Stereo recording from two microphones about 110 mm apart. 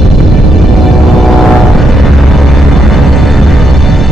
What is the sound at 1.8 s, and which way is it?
Music, centre (ahead or behind).